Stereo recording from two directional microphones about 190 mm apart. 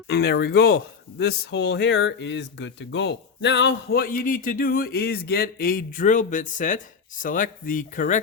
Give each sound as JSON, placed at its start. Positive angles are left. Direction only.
{"t": 0.1, "sound": "speech", "side_deg": 60}